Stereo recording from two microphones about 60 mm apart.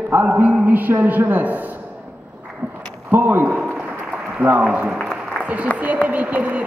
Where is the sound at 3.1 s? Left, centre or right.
Right.